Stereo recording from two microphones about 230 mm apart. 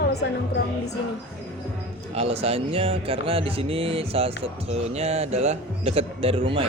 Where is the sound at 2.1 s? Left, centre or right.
Right.